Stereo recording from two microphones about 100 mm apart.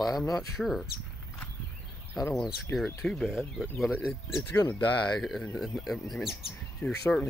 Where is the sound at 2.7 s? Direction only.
5° left (ahead or behind).